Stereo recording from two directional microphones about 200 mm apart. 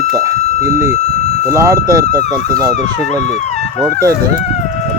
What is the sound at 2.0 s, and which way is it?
Speech, 45° right (ahead or behind).